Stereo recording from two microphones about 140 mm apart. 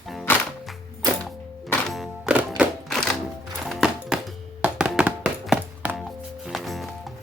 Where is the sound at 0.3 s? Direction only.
15° left (ahead or behind).